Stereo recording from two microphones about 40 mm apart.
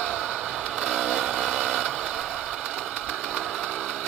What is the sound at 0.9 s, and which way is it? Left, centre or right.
Vehicle, centre.